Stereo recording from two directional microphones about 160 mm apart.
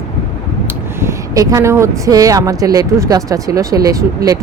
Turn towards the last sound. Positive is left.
turn(degrees=-20)  # may be behind; listen again after turning